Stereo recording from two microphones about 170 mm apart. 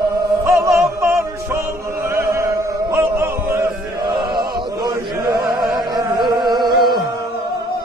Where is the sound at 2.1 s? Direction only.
20° right (ahead or behind).